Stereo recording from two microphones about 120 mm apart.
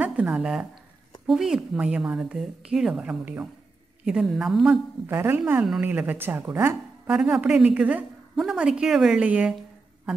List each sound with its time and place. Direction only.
0.0 s a woman's voice: 10° right (ahead or behind)
5.0 s a woman's voice: 20° right (ahead or behind)
7.1 s a woman's voice: 5° right (ahead or behind)